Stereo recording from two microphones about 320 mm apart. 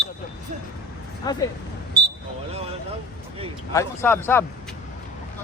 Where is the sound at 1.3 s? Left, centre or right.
Centre.